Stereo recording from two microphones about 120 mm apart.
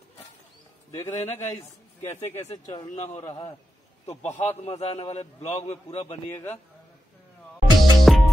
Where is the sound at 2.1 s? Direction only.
70° left (ahead or behind).